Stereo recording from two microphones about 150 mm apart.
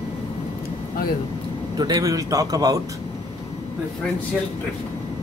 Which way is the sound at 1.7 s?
25° right (ahead or behind).